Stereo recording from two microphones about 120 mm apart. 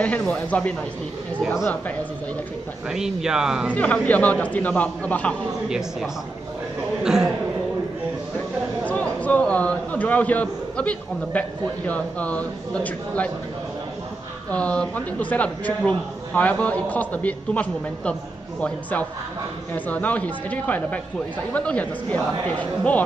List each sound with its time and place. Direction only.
0.0 s a man's voice: 10° left (ahead or behind)
2.9 s speech: 5° right (ahead or behind)
3.7 s a man's voice: 10° left (ahead or behind)
5.7 s speech: 5° right (ahead or behind)
7.0 s chuckle: 5° right (ahead or behind)
8.8 s a man's voice: 10° left (ahead or behind)
14.5 s a man's voice: 10° left (ahead or behind)